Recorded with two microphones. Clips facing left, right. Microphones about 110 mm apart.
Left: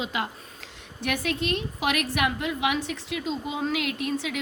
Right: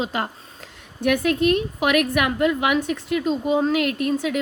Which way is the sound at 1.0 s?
55° right (ahead or behind).